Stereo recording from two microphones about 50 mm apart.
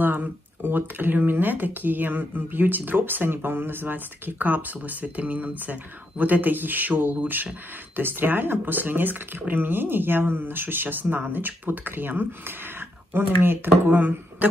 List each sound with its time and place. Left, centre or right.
0.0 s speech: right